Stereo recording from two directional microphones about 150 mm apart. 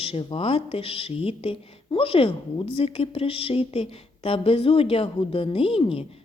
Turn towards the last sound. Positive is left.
turn(degrees=40)  # may be behind; listen again after turning